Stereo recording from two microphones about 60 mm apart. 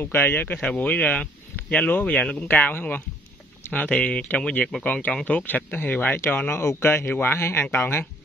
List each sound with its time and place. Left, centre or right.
0.0 s speech: left
0.7 s speech: left
6.1 s speech: left